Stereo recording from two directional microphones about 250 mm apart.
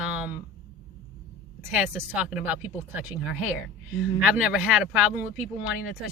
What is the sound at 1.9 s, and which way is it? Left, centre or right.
Speech, centre.